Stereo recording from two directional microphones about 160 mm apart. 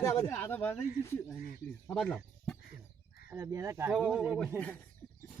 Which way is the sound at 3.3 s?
20° right (ahead or behind).